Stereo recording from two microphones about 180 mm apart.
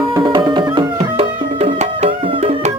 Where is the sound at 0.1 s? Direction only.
25° right (ahead or behind).